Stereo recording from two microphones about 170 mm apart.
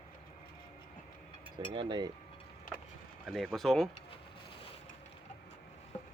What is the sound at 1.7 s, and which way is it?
Speech, 30° right (ahead or behind).